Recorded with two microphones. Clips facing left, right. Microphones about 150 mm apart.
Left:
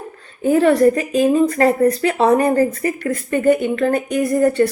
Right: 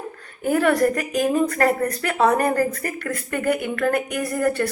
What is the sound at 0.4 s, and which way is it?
Speech, 25° left (ahead or behind).